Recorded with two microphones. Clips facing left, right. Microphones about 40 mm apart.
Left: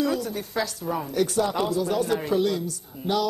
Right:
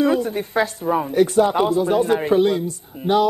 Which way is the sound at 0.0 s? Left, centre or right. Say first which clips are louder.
Right 7 dB; right.